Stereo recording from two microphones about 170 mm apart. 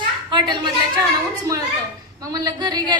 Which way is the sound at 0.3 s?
25° right (ahead or behind).